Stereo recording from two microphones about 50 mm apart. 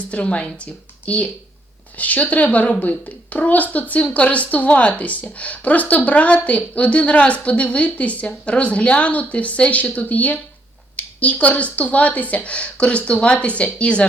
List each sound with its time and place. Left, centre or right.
0.1 s speech: left